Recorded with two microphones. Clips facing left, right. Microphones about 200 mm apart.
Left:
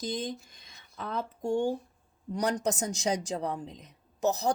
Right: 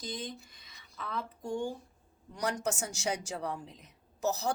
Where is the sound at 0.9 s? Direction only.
45° left (ahead or behind).